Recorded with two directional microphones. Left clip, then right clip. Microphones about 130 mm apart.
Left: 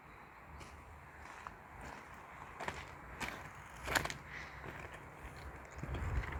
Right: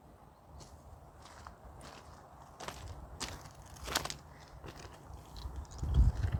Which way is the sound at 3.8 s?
60° left (ahead or behind).